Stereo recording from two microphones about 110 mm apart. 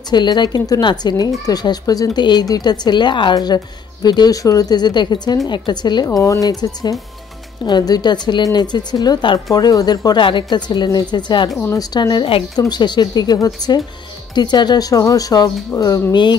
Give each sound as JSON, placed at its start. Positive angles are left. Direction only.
{"t": 0.1, "sound": "speech", "side_deg": 40}
{"t": 6.0, "sound": "speech", "side_deg": 30}
{"t": 16.1, "sound": "a woman's voice", "side_deg": 45}